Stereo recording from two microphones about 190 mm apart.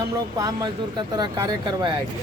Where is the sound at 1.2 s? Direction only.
20° right (ahead or behind).